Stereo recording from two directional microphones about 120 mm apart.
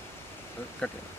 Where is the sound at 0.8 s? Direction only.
5° left (ahead or behind).